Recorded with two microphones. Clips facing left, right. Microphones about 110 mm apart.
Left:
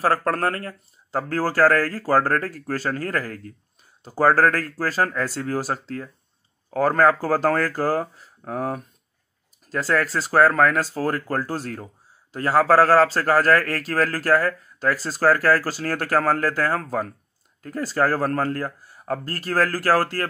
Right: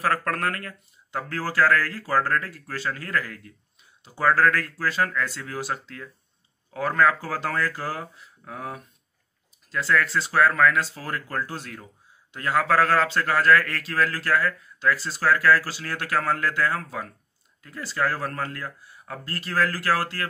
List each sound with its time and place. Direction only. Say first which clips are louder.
0.0 s speech: left 4 dB; 30° left (ahead or behind)